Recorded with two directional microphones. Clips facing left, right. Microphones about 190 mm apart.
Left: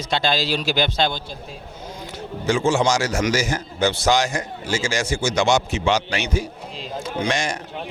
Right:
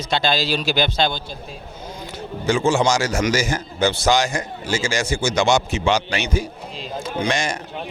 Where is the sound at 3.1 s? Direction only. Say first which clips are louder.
Right 1 dB; 25° right (ahead or behind).